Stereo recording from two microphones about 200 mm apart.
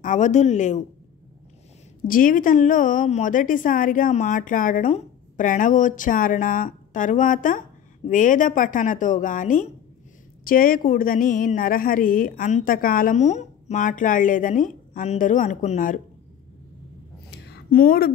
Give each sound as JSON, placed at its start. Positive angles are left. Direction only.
{"t": 0.0, "sound": "a woman's voice", "side_deg": 40}
{"t": 2.0, "sound": "a woman's voice", "side_deg": 45}
{"t": 17.3, "sound": "a sound", "side_deg": 50}